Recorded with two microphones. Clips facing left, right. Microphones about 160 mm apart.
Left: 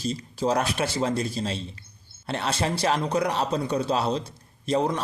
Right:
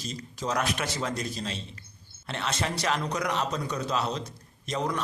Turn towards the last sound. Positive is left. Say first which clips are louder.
# left 6 dB
turn(degrees=30)  # may be behind; listen again after turning